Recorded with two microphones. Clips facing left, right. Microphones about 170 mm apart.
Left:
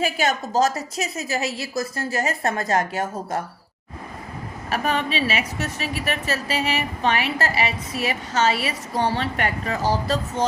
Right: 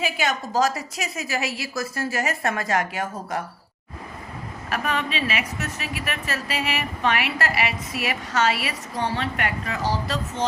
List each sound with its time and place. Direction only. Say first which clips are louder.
0.0 s a woman's voice: left 3 dB; 45° left (ahead or behind)
0.5 s a woman's voice: left 1 dB; 25° left (ahead or behind)
1.0 s a woman's voice: left 1 dB; 40° left (ahead or behind)
1.7 s a woman's voice: left 1 dB; 20° left (ahead or behind)
2.1 s a woman's voice: left 3 dB; 30° left (ahead or behind)
4.7 s a woman's voice: left 3 dB; 30° left (ahead or behind)